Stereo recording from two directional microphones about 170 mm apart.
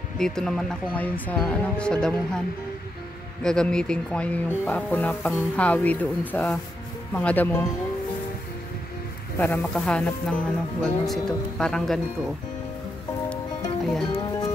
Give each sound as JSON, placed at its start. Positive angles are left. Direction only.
{"t": 0.2, "sound": "speech", "side_deg": 5}
{"t": 3.4, "sound": "speech", "side_deg": 5}
{"t": 9.4, "sound": "speech", "side_deg": 10}
{"t": 14.0, "sound": "music", "side_deg": 25}